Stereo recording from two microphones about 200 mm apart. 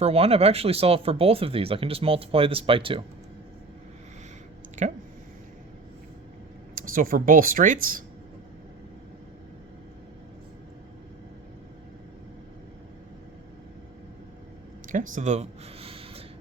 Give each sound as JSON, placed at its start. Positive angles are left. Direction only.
{"t": 0.0, "sound": "speech", "side_deg": -30}
{"t": 4.8, "sound": "speech", "side_deg": -35}
{"t": 6.7, "sound": "speech", "side_deg": -45}
{"t": 14.9, "sound": "a sound", "side_deg": -40}